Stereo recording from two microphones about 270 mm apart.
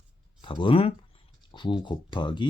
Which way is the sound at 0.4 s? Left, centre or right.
Centre.